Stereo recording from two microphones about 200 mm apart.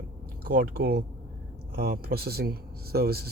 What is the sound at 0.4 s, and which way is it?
Speech, 50° right (ahead or behind).